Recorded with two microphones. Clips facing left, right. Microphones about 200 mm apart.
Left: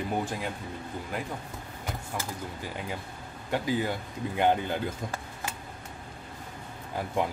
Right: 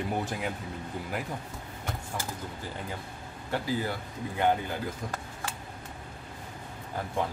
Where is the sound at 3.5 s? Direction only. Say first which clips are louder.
Left 2 dB; 20° left (ahead or behind).